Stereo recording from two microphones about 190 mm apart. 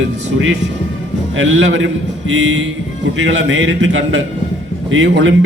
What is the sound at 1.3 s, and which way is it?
A man's voice, 70° right (ahead or behind).